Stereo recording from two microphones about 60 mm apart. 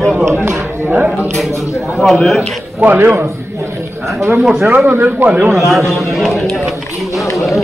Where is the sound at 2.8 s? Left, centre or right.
Right.